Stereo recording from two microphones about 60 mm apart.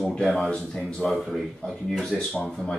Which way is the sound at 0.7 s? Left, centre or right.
Centre.